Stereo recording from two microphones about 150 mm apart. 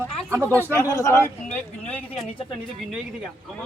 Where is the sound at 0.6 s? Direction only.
20° left (ahead or behind).